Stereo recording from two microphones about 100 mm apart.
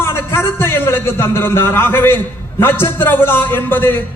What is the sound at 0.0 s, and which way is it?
A man's voice, 25° left (ahead or behind).